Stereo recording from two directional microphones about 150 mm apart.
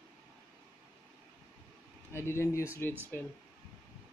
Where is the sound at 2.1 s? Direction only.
15° left (ahead or behind).